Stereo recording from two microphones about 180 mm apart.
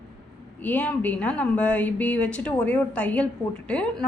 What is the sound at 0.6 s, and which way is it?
A woman's voice, 10° left (ahead or behind).